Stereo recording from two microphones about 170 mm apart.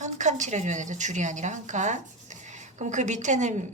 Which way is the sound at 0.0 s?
45° right (ahead or behind).